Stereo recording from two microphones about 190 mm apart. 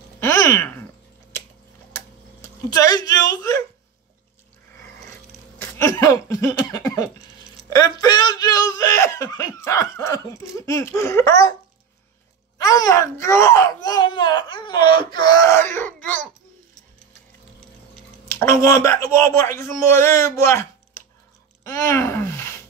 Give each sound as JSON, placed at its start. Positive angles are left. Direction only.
{"t": 0.2, "sound": "a sound", "side_deg": 15}
{"t": 2.7, "sound": "a woman's voice", "side_deg": 20}
{"t": 3.3, "sound": "cough", "side_deg": 15}
{"t": 5.6, "sound": "cough", "side_deg": 15}
{"t": 12.5, "sound": "cough", "side_deg": 20}
{"t": 18.3, "sound": "cough", "side_deg": 15}